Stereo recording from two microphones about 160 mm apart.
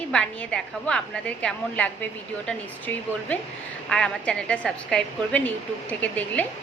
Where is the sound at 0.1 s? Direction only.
5° left (ahead or behind).